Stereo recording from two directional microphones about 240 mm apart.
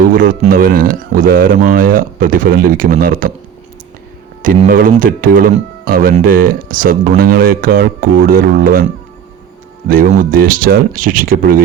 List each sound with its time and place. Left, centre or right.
0.0 s speech: right
4.4 s speech: right
9.9 s speech: right